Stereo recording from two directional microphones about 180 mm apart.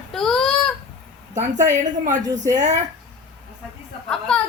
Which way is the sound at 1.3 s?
40° right (ahead or behind).